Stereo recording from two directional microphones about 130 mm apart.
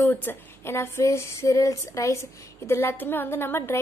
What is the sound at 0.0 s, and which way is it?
A woman's voice, 15° left (ahead or behind).